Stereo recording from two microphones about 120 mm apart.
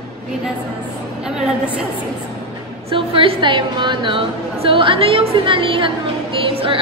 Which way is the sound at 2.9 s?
50° right (ahead or behind).